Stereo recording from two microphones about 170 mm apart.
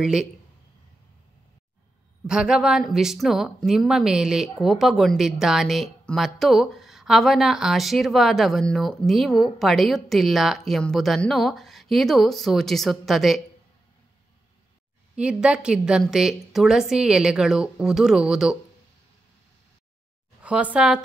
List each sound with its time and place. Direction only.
0.0 s a woman's voice: 5° right (ahead or behind)
2.2 s a woman's voice: 5° right (ahead or behind)
15.1 s a woman's voice: 5° right (ahead or behind)
20.4 s speech: 5° right (ahead or behind)